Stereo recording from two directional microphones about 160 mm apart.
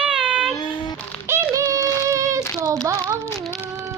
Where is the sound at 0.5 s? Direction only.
25° left (ahead or behind).